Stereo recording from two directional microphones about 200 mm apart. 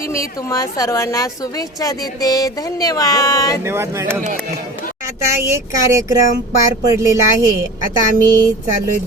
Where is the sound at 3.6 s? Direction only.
15° right (ahead or behind).